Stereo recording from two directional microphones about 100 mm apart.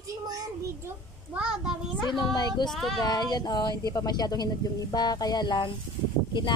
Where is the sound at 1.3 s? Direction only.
10° right (ahead or behind).